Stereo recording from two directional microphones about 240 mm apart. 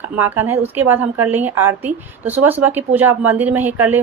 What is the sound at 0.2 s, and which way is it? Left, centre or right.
A woman's voice, centre.